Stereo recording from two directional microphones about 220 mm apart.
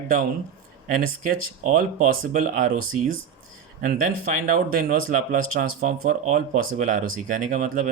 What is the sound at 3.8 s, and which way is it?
Speech, 35° right (ahead or behind).